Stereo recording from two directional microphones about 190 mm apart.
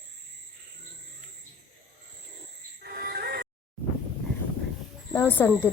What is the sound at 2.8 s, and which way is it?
Music, 60° right (ahead or behind).